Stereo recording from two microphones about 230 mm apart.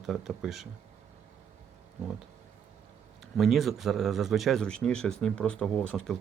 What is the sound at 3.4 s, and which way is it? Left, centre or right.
Speech, centre.